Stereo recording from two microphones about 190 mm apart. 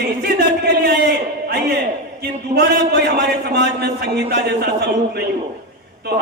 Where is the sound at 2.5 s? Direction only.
55° right (ahead or behind).